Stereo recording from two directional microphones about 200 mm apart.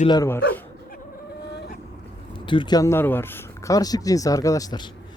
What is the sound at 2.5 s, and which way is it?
Speech, 20° left (ahead or behind).